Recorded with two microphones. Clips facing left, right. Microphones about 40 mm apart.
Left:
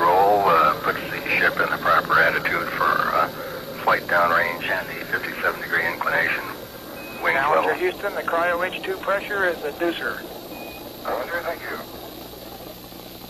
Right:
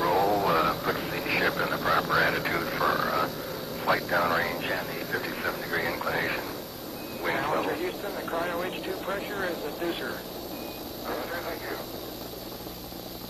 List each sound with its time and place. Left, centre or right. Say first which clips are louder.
0.0 s a sound: left 8 dB; left
3.8 s speech: left 7 dB; left
11.1 s speech: left 8 dB; left